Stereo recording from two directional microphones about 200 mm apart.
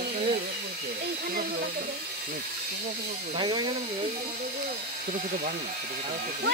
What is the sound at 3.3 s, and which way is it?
Speech, 25° right (ahead or behind).